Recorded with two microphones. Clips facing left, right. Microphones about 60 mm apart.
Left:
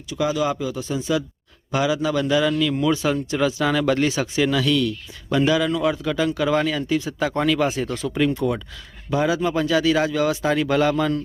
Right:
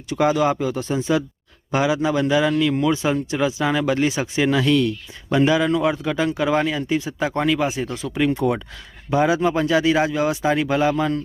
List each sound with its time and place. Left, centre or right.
0.1 s a man's voice: right; by 11.1 s centre